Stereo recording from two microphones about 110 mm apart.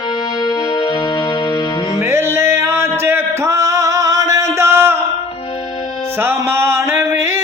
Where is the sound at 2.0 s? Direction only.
25° right (ahead or behind).